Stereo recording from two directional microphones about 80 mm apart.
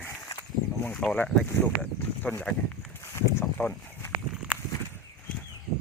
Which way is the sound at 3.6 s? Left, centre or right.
Left.